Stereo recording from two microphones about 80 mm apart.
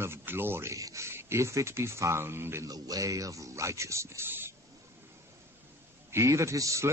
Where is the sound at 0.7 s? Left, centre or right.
Right.